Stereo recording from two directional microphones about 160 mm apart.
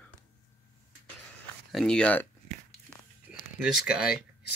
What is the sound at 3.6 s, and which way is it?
Speech, 5° right (ahead or behind).